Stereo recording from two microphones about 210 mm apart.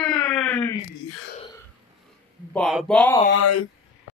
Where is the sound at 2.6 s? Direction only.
Centre (ahead or behind).